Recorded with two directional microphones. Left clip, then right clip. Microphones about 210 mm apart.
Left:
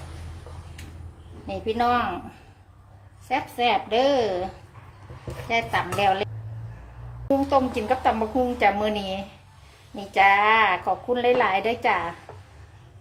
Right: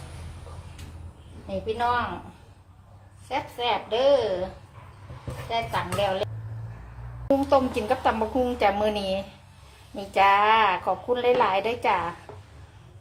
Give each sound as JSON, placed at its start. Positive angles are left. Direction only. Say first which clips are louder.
{"t": 1.5, "sound": "a woman's voice", "louder": "left 3 dB", "side_deg": 45}
{"t": 3.2, "sound": "a woman's voice", "louder": "left 4 dB", "side_deg": 30}
{"t": 5.5, "sound": "a woman's voice", "louder": "left 4 dB", "side_deg": 40}
{"t": 7.3, "sound": "speech", "louder": "even", "side_deg": 0}